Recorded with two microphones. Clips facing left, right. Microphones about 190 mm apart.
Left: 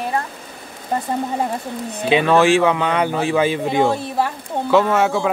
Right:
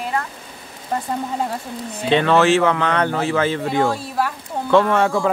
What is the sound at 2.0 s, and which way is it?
Speech, 10° left (ahead or behind).